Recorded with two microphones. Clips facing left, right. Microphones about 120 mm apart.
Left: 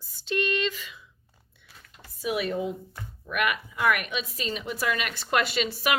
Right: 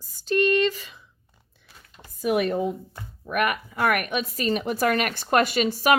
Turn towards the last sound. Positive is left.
turn(degrees=-45)  # may be behind; listen again after turning